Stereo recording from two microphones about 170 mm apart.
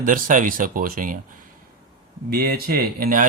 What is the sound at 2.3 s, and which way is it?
Speech, 65° right (ahead or behind).